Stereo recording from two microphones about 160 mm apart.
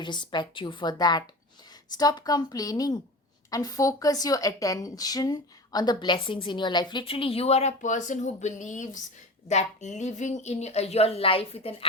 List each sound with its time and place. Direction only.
0.0 s a woman's voice: 30° left (ahead or behind)